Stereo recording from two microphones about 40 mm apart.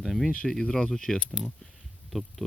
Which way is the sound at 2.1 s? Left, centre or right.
Centre.